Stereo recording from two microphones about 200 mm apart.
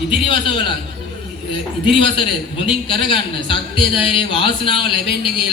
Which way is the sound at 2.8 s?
25° left (ahead or behind).